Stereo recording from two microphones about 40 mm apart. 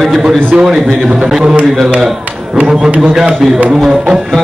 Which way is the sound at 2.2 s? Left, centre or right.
Right.